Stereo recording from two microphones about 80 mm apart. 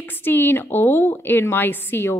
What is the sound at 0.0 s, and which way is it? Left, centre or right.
A woman's voice, left.